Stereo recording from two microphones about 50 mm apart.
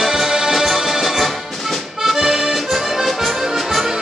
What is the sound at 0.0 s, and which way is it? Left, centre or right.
Music, centre.